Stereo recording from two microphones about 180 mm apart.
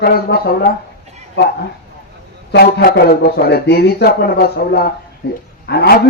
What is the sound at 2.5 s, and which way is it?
A man's voice, 60° left (ahead or behind).